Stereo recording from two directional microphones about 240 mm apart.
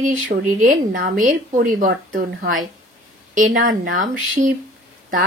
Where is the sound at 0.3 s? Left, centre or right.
Right.